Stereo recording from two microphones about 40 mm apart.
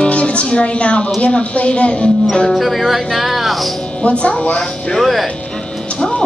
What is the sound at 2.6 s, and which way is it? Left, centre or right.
Speech, centre.